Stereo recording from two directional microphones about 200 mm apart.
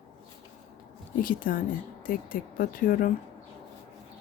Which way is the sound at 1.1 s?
45° left (ahead or behind).